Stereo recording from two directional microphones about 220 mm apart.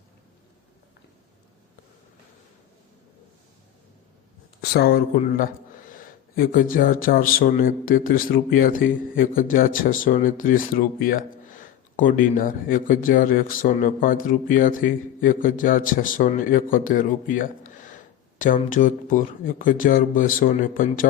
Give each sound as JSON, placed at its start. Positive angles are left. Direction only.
{"t": 4.6, "sound": "speech", "side_deg": 45}